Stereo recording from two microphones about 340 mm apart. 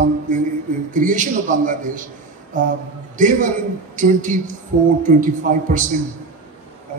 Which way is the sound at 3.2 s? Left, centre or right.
Right.